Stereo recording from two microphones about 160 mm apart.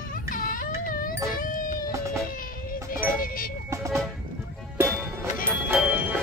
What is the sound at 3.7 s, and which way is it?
Vehicle, 20° right (ahead or behind).